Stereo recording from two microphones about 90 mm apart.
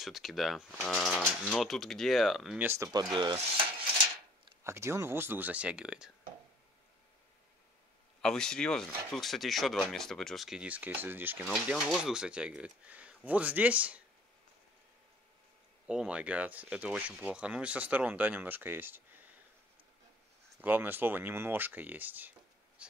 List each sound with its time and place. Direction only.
0.0 s speech: centre (ahead or behind)
2.6 s speech: 25° right (ahead or behind)
2.9 s speech: 50° right (ahead or behind)
4.6 s speech: 30° right (ahead or behind); by 6.1 s 10° right (ahead or behind)
8.2 s speech: 5° left (ahead or behind)
10.6 s speech: 15° right (ahead or behind)
11.7 s speech: 5° right (ahead or behind)
15.9 s speech: 10° right (ahead or behind)
20.6 s speech: 20° right (ahead or behind)
22.8 s a sound: 15° right (ahead or behind)